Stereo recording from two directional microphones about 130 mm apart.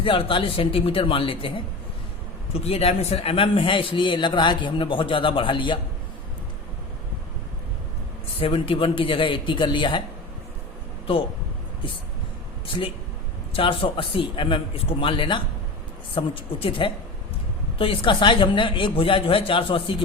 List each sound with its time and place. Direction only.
0.0 s a man's voice: 40° left (ahead or behind)
8.4 s a man's voice: 45° left (ahead or behind)
11.0 s speech: 45° left (ahead or behind)
12.6 s a man's voice: 45° left (ahead or behind)